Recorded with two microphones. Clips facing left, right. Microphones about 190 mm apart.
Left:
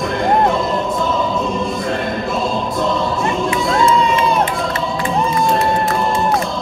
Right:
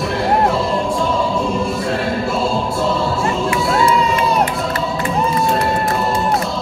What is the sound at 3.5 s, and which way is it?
Crowd, 5° right (ahead or behind).